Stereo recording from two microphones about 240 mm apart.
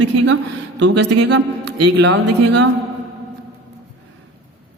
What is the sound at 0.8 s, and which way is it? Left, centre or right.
A woman's voice, right.